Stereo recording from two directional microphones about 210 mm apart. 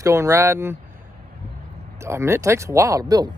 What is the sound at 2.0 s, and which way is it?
Speech, 10° right (ahead or behind).